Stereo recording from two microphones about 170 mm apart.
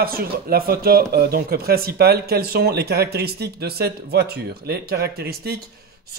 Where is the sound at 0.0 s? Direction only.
60° right (ahead or behind).